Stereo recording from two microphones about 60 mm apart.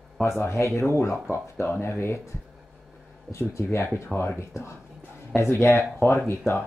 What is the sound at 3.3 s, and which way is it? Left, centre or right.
Speech, left.